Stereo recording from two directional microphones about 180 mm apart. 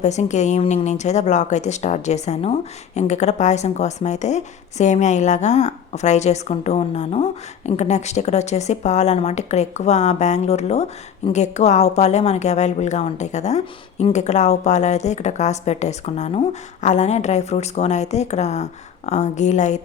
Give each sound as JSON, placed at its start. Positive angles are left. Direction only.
{"t": 0.0, "sound": "speech", "side_deg": 40}